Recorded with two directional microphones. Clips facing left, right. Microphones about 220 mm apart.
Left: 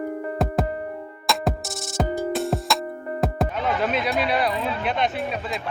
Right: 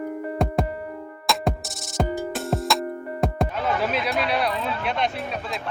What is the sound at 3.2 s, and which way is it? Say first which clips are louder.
Speech: even; centre (ahead or behind).